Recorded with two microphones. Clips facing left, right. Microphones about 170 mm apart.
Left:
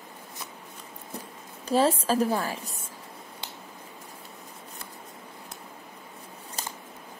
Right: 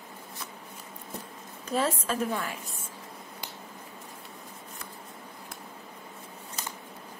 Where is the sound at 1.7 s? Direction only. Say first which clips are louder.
Left 6 dB; 30° left (ahead or behind).